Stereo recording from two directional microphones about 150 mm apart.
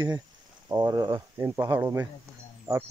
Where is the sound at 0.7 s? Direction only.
25° right (ahead or behind).